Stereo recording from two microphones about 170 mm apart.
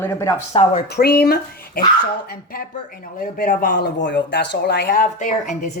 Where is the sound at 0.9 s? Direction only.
70° left (ahead or behind).